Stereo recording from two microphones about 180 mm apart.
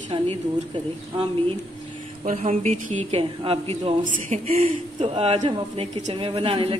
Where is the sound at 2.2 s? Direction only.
45° right (ahead or behind).